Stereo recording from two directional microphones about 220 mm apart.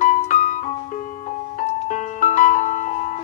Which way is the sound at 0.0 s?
35° left (ahead or behind).